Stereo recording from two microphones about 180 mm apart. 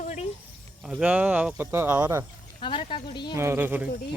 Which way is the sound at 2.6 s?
25° left (ahead or behind).